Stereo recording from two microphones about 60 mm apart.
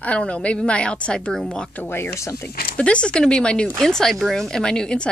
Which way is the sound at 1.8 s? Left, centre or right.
Left.